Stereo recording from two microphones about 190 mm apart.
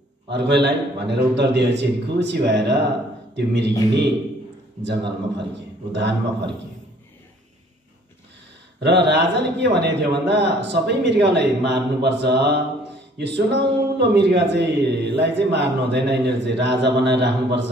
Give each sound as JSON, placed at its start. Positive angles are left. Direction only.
{"t": 0.3, "sound": "a man's voice", "side_deg": -65}
{"t": 8.8, "sound": "a man's voice", "side_deg": -65}